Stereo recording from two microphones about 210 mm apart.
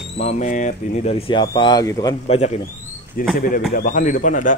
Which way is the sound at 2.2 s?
30° left (ahead or behind).